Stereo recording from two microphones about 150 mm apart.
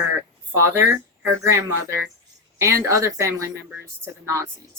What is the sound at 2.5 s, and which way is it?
Speech, 20° right (ahead or behind).